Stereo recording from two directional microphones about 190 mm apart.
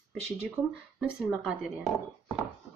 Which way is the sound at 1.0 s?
Centre (ahead or behind).